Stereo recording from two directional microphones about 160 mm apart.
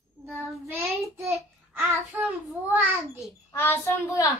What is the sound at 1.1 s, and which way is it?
Child singing, 15° right (ahead or behind).